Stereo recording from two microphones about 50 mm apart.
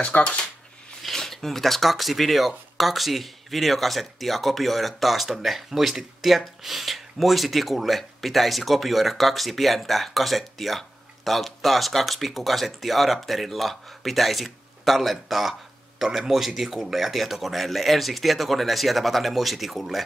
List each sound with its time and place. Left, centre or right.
0.0 s speech: left
1.0 s speech: centre